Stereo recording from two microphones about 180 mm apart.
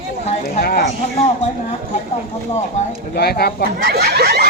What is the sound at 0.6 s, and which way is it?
Speech, 60° left (ahead or behind).